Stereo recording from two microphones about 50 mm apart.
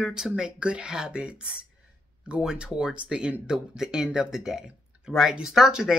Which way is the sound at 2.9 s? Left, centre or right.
Centre.